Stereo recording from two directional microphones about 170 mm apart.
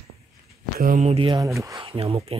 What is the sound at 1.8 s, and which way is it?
Speech, 35° right (ahead or behind).